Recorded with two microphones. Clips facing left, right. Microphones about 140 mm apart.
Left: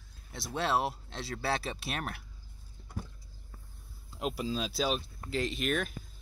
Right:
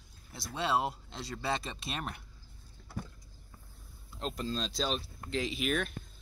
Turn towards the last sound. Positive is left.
turn(degrees=0)  # may be behind; listen again after turning